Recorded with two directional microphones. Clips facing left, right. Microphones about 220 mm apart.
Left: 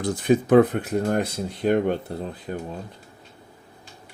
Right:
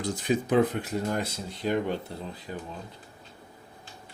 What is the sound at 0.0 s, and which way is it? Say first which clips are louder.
Speech: left 7 dB; 55° left (ahead or behind).